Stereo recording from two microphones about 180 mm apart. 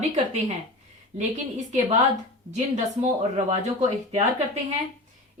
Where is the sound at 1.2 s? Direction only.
45° right (ahead or behind).